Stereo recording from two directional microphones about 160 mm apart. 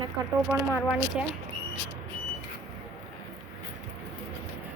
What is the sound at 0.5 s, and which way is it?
Speech, 15° right (ahead or behind).